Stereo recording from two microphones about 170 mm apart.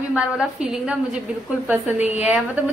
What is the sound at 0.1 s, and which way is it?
A woman's voice, 5° right (ahead or behind).